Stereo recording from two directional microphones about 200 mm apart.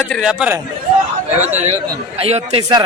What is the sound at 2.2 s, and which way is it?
Speech, 30° right (ahead or behind).